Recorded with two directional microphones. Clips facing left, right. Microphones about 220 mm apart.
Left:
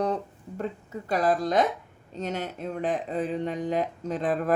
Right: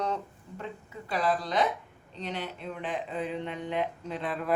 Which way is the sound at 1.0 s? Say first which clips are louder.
Left 5 dB; 45° left (ahead or behind).